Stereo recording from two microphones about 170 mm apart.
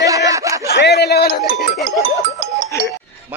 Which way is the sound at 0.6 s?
75° left (ahead or behind).